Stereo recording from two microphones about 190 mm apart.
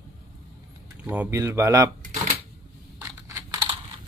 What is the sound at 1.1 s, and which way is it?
Speech, 10° right (ahead or behind).